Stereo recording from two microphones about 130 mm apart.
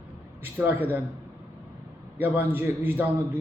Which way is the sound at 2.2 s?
15° right (ahead or behind).